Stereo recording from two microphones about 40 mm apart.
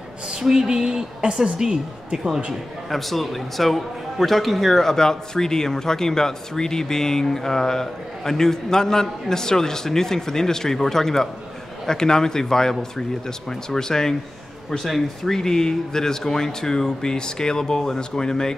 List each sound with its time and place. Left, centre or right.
0.3 s a woman's voice: centre
2.9 s a man's voice: centre
14.9 s speech: centre
15.3 s a man's voice: centre